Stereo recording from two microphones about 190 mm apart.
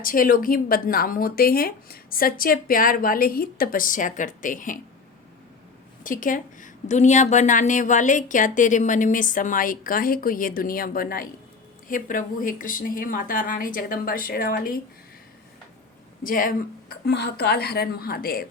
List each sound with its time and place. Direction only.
0.0 s a woman's voice: 45° left (ahead or behind)
6.0 s a woman's voice: 45° left (ahead or behind)
16.2 s a woman's voice: 45° left (ahead or behind)